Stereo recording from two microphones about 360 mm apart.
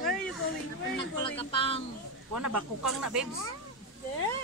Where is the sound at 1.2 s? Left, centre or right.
Centre.